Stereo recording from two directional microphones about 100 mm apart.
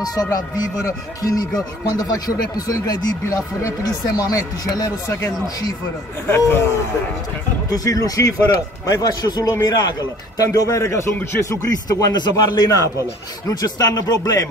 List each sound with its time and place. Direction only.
0.0 s a man's voice: 40° left (ahead or behind)
2.5 s a man's voice: 40° left (ahead or behind)
6.2 s speech: 25° left (ahead or behind)
7.7 s a man's voice: 35° left (ahead or behind)